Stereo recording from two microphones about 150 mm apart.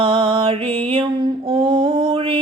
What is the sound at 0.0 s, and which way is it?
Mantra, 35° right (ahead or behind).